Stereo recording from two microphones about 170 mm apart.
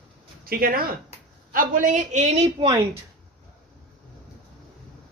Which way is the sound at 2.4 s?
25° right (ahead or behind).